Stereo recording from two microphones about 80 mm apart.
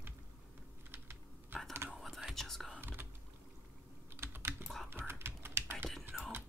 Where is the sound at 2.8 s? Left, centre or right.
Right.